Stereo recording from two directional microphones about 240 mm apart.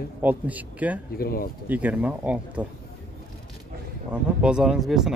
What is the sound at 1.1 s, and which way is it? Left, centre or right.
Speech, left.